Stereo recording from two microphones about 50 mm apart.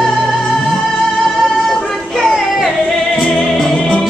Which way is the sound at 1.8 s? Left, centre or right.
Centre.